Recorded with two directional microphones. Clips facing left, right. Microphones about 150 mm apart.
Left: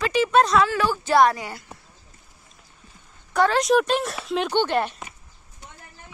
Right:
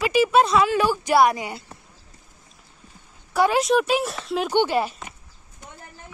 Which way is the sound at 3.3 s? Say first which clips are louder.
Even; 10° right (ahead or behind).